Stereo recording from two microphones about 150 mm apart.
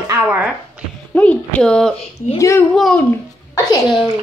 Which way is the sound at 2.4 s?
20° left (ahead or behind).